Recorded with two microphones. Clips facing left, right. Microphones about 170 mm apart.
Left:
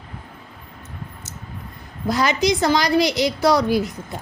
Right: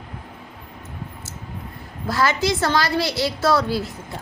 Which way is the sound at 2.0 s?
15° left (ahead or behind).